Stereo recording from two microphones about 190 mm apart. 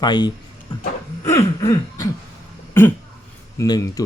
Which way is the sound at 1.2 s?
15° left (ahead or behind).